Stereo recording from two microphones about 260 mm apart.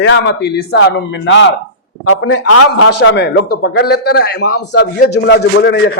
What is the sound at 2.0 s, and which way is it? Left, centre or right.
Speech, left.